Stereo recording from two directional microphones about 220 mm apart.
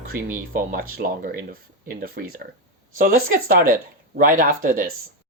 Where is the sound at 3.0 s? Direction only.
40° right (ahead or behind).